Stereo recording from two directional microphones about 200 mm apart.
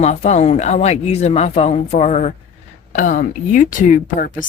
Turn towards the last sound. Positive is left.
turn(degrees=40)  # may be behind; listen again after turning